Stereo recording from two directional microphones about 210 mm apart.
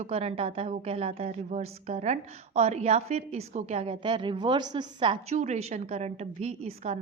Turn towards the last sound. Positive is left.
turn(degrees=-30)  # may be behind; listen again after turning